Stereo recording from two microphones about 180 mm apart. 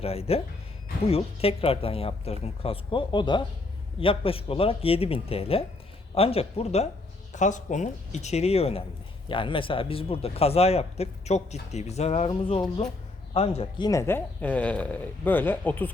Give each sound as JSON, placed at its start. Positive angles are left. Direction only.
{"t": 0.0, "sound": "speech", "side_deg": 35}